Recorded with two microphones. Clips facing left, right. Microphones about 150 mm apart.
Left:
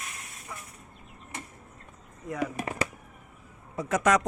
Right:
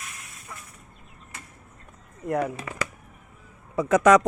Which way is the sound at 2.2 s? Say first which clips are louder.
Right 6 dB; 60° right (ahead or behind).